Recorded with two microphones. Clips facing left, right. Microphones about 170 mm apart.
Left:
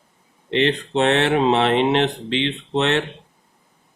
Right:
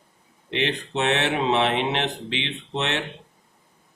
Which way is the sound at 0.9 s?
55° left (ahead or behind).